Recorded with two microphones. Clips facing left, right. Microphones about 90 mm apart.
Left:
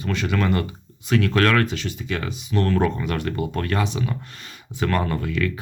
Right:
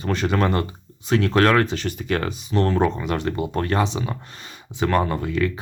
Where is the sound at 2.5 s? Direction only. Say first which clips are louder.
Right 1 dB; 25° right (ahead or behind).